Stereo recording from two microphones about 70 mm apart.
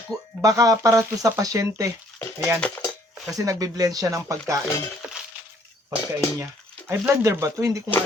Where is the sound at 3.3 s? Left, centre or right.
Right.